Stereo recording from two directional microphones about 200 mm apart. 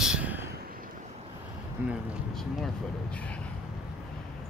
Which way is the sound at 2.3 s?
Centre (ahead or behind).